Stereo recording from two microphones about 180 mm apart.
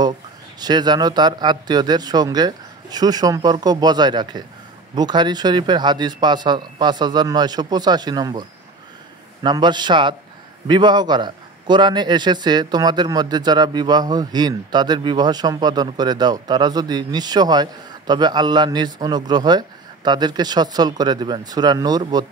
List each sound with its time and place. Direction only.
0.6 s a man's voice: 25° right (ahead or behind)